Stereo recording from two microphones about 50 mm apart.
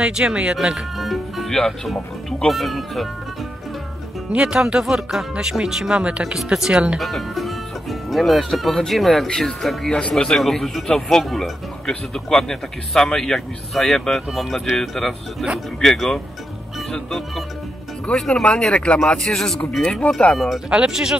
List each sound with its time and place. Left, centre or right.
0.0 s speech: right
0.9 s speech: centre
4.3 s speech: centre
4.8 s speech: centre
7.0 s speech: centre
9.9 s speech: centre
10.3 s speech: centre
18.1 s speech: centre
19.2 s speech: centre
20.3 s speech: centre
20.7 s speech: centre